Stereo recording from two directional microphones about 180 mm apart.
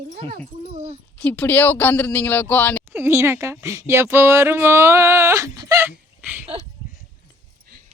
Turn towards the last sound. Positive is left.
turn(degrees=-10)  # may be behind; listen again after turning